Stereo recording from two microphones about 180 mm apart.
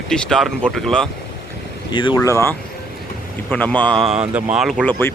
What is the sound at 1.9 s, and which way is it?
Speech, 20° left (ahead or behind).